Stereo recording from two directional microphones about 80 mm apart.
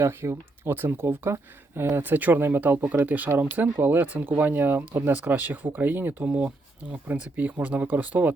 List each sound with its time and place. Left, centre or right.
0.0 s speech: right